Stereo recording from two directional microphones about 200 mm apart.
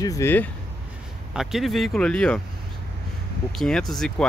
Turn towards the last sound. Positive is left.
turn(degrees=0)  # may be behind; listen again after turning